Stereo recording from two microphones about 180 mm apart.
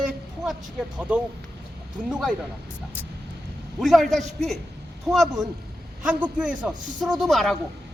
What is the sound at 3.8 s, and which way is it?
A man's voice, centre (ahead or behind).